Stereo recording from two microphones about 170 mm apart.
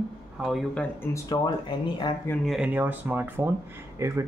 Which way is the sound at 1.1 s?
25° left (ahead or behind).